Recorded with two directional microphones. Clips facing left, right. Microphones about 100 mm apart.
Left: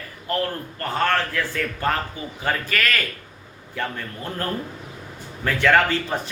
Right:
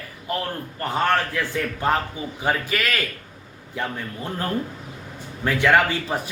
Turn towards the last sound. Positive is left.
turn(degrees=-15)  # may be behind; listen again after turning